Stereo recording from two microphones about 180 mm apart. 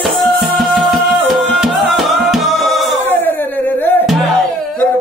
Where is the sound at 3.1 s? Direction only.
10° left (ahead or behind).